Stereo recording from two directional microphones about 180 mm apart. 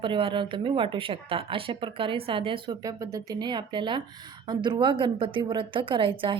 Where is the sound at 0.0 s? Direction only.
30° right (ahead or behind).